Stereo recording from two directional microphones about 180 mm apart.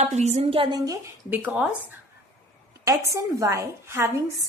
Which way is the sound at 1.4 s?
5° right (ahead or behind).